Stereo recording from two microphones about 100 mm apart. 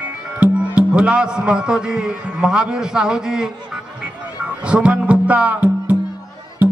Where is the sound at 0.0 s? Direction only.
10° right (ahead or behind).